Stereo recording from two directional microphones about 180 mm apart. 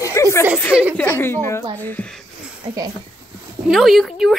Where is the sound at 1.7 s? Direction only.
10° left (ahead or behind).